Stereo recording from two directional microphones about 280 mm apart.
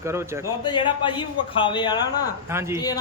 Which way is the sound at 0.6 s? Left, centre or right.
Centre.